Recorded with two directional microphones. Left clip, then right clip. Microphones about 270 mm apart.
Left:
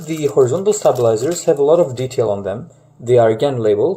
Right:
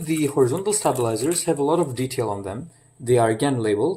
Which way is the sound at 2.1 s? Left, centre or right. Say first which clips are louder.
Left 8 dB; right.